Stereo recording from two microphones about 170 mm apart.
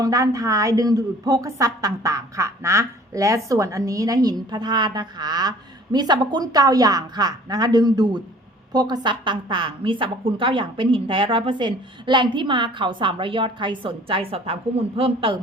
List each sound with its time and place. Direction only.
0.0 s a woman's voice: 20° right (ahead or behind)